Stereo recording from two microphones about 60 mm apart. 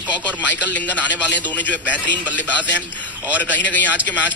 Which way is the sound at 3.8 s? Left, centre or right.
Right.